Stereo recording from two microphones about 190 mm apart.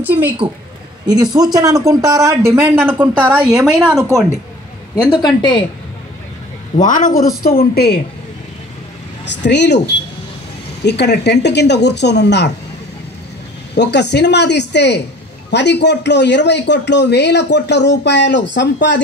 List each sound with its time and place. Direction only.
0.0 s speech: 10° right (ahead or behind)
1.0 s speech: 20° right (ahead or behind); by 4.0 s 5° right (ahead or behind)
4.9 s speech: 25° left (ahead or behind)
6.8 s a man's voice: 45° left (ahead or behind)
9.3 s a woman's voice: 65° left (ahead or behind)
10.8 s speech: 60° left (ahead or behind)
13.7 s speech: 65° left (ahead or behind)